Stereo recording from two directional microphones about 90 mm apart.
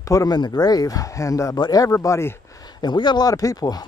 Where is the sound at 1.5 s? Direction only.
45° left (ahead or behind).